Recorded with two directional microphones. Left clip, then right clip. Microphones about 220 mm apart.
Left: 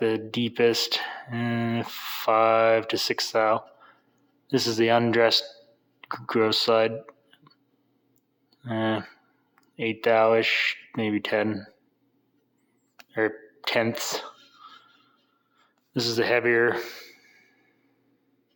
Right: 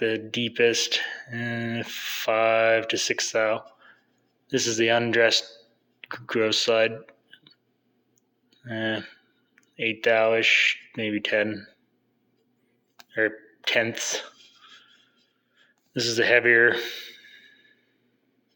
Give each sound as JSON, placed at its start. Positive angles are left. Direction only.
{"t": 0.0, "sound": "speech", "side_deg": 25}
{"t": 13.1, "sound": "speech", "side_deg": 25}
{"t": 15.6, "sound": "a sound", "side_deg": 20}